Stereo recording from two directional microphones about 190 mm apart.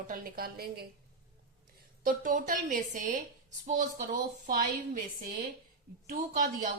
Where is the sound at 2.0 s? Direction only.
45° right (ahead or behind).